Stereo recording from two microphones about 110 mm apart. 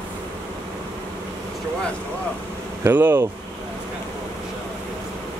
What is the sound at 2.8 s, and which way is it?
Speech, 20° right (ahead or behind).